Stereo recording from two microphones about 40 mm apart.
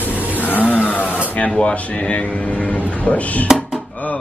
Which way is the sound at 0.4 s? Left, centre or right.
Left.